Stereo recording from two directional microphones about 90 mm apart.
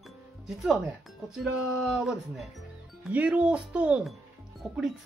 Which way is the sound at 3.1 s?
15° right (ahead or behind).